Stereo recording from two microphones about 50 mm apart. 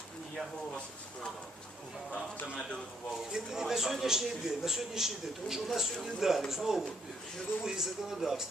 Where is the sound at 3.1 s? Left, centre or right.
Centre.